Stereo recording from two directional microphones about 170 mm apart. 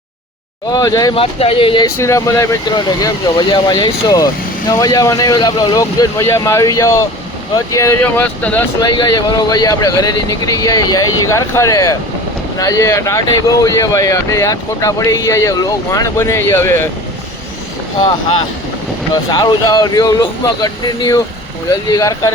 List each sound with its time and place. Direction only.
0.7 s speech: 20° left (ahead or behind)
1.2 s speech: 35° left (ahead or behind)
2.0 s speech: 15° left (ahead or behind)
8.8 s speech: 25° left (ahead or behind)
19.3 s speech: 25° left (ahead or behind)